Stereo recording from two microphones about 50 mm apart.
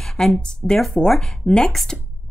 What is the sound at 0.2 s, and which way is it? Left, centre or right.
Speech, centre.